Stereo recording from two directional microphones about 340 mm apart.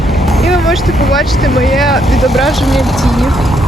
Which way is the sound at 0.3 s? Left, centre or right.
Centre.